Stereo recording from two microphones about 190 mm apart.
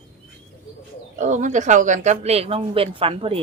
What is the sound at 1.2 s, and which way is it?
Speech, 40° right (ahead or behind).